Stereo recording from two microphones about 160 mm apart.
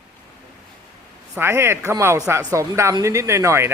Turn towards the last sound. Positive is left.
turn(degrees=-15)  # may be behind; listen again after turning